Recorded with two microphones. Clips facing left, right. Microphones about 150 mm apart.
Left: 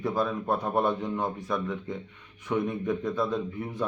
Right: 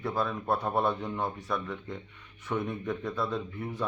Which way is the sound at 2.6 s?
10° left (ahead or behind).